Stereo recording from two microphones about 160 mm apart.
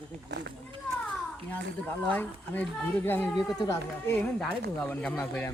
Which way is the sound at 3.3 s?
25° left (ahead or behind).